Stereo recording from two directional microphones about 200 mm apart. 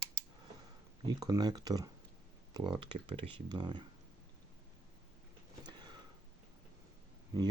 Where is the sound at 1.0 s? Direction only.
20° right (ahead or behind).